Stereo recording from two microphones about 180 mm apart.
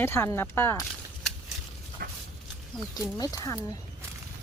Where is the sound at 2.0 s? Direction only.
55° right (ahead or behind).